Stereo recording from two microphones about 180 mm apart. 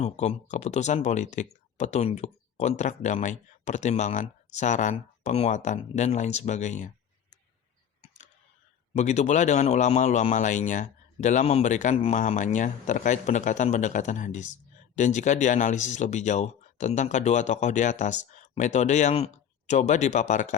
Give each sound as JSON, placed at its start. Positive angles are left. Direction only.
{"t": 0.0, "sound": "speech", "side_deg": 40}
{"t": 9.0, "sound": "speech", "side_deg": 40}